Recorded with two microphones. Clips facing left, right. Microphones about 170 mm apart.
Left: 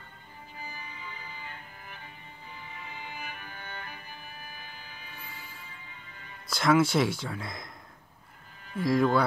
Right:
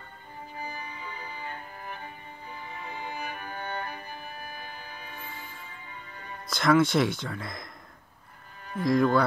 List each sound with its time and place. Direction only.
0.7 s music: 40° right (ahead or behind)
6.5 s speech: 5° left (ahead or behind)
8.8 s speech: 5° left (ahead or behind)